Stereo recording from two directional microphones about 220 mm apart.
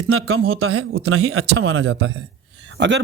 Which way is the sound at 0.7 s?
75° right (ahead or behind).